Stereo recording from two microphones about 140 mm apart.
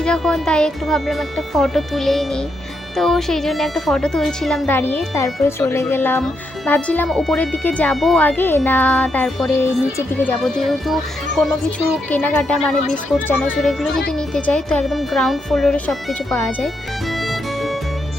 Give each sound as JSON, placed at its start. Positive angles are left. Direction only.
{"t": 0.0, "sound": "a woman's voice", "side_deg": 5}
{"t": 4.7, "sound": "a woman's voice", "side_deg": 15}
{"t": 8.2, "sound": "a woman's voice", "side_deg": 15}
{"t": 16.6, "sound": "music", "side_deg": 0}